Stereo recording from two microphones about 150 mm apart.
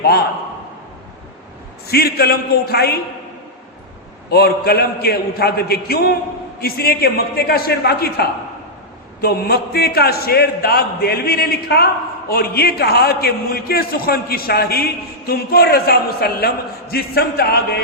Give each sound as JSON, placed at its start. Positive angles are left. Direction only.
{"t": 1.9, "sound": "speech", "side_deg": 90}
{"t": 4.3, "sound": "speech", "side_deg": 90}